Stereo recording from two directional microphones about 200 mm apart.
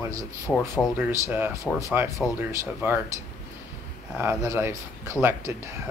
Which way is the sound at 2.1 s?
15° left (ahead or behind).